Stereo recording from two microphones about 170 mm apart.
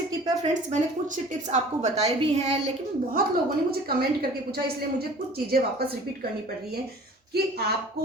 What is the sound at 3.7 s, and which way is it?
A woman's voice, 65° right (ahead or behind).